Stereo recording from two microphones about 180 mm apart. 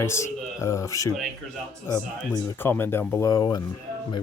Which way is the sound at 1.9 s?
15° left (ahead or behind).